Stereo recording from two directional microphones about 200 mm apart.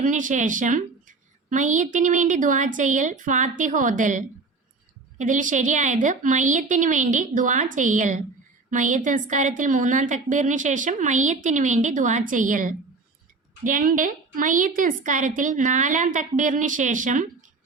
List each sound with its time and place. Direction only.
0.0 s a woman's voice: 40° right (ahead or behind)